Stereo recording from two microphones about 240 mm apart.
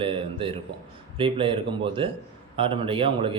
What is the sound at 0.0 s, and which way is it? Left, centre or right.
A man's voice, right.